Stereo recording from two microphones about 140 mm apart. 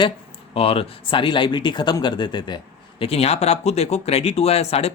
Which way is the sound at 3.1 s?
45° left (ahead or behind).